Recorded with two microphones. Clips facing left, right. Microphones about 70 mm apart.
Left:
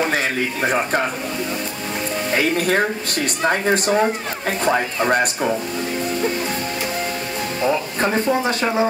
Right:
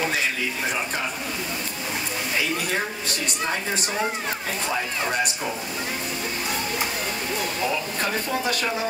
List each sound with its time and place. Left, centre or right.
0.1 s speech: left
2.3 s speech: left
7.6 s speech: left